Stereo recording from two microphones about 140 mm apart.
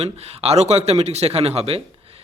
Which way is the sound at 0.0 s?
45° right (ahead or behind).